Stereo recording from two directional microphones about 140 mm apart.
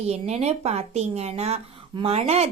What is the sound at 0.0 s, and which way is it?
Speech, 50° right (ahead or behind).